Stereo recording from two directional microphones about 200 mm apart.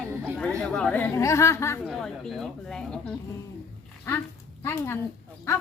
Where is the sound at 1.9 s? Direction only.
Centre (ahead or behind).